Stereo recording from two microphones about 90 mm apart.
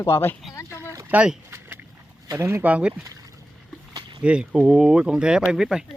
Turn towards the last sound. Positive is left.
turn(degrees=-5)  # may be behind; listen again after turning